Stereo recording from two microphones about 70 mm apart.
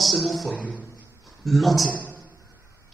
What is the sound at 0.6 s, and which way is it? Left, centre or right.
Speech, left.